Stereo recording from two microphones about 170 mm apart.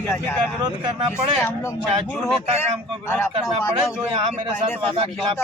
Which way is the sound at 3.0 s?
15° left (ahead or behind).